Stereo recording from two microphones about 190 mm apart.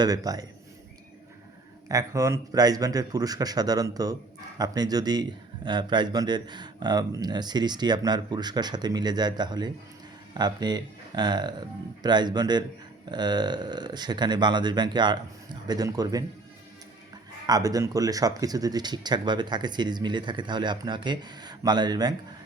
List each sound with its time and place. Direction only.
0.0 s a man's voice: 20° right (ahead or behind)
1.9 s a man's voice: 20° right (ahead or behind)
17.4 s a man's voice: 20° right (ahead or behind)